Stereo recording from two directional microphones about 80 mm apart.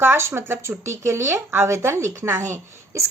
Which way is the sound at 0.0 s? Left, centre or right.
Right.